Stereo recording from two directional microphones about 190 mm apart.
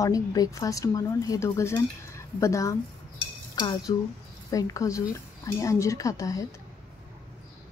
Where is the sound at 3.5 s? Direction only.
20° left (ahead or behind).